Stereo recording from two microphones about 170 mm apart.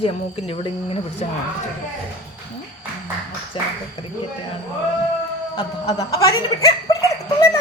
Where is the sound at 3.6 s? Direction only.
35° left (ahead or behind).